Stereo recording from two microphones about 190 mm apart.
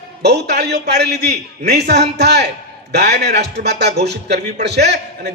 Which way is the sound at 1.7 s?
60° right (ahead or behind).